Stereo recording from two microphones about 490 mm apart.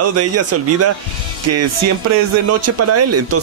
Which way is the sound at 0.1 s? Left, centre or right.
Right.